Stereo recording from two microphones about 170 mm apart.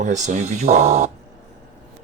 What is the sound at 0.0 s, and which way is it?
Speech, 45° right (ahead or behind).